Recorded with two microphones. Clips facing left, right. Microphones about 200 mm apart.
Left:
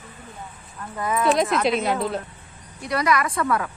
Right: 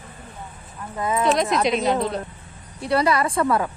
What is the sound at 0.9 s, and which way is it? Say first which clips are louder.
Speech: right 1 dB; 25° right (ahead or behind).